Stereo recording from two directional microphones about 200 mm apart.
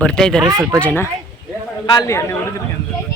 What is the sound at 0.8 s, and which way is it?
Speech, 10° left (ahead or behind).